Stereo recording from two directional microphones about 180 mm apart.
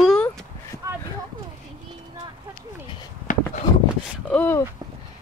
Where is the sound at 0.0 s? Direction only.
5° left (ahead or behind).